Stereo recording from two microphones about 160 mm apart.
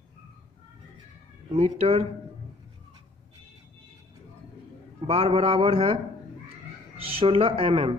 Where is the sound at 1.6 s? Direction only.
40° right (ahead or behind).